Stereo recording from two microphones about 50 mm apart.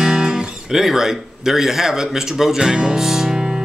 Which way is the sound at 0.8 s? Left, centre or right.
Centre.